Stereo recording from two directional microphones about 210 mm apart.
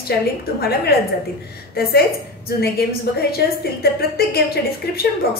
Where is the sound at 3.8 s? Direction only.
50° left (ahead or behind).